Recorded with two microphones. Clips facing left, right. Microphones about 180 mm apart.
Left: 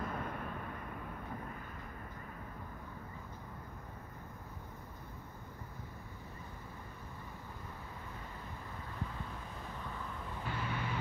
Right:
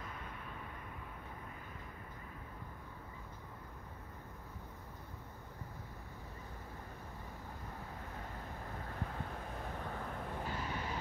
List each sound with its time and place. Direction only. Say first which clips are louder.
0.0 s vehicle: left 8 dB; 55° left (ahead or behind)
8.8 s vehicle: even; 50° right (ahead or behind)